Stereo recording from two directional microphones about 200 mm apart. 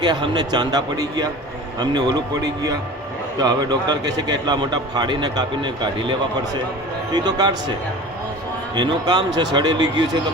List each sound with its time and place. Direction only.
0.0 s a man's voice: 20° right (ahead or behind)
8.7 s a man's voice: 20° right (ahead or behind)